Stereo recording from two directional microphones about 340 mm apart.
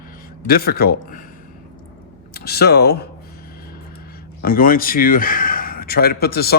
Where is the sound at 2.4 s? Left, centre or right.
Left.